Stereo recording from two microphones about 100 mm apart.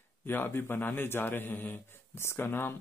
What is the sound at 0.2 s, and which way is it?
A man's voice, 20° left (ahead or behind).